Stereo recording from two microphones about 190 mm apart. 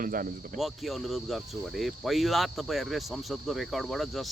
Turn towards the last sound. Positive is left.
turn(degrees=0)  # may be behind; listen again after turning